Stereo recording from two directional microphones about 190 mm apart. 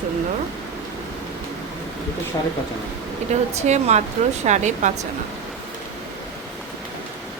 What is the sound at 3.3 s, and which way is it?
Speech, 35° right (ahead or behind).